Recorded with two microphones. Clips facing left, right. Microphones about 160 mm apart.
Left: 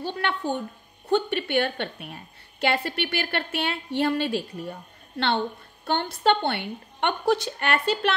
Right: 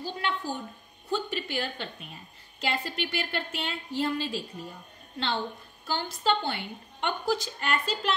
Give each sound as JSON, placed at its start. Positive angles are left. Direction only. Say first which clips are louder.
{"t": 0.0, "sound": "a woman's voice", "louder": "left 4 dB", "side_deg": 65}
{"t": 5.9, "sound": "a woman's voice", "louder": "left 5 dB", "side_deg": 65}